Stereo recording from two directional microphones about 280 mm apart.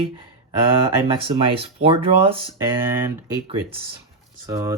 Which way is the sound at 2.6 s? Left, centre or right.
Centre.